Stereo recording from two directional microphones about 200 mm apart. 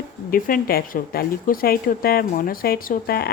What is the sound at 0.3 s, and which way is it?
Speech, 45° left (ahead or behind).